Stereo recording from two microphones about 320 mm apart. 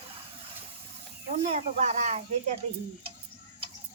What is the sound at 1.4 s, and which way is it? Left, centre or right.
Speech, centre.